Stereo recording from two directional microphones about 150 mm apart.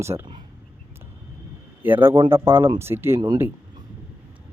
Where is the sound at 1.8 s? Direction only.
15° right (ahead or behind).